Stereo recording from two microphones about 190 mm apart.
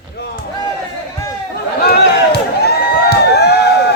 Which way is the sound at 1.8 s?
60° left (ahead or behind).